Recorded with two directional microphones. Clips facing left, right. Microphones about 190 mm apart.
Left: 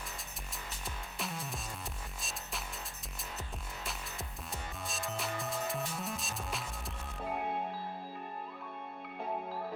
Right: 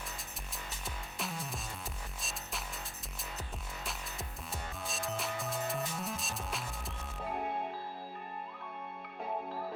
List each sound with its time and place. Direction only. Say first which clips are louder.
0.5 s music: even; centre (ahead or behind)
4.5 s music: right 1 dB; centre (ahead or behind)